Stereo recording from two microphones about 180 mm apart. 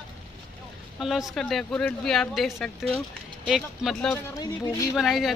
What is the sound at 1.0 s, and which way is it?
Speech, centre (ahead or behind).